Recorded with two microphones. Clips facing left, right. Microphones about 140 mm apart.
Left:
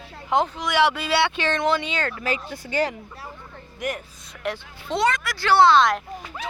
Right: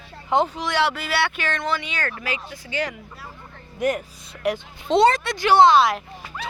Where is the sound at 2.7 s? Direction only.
40° left (ahead or behind).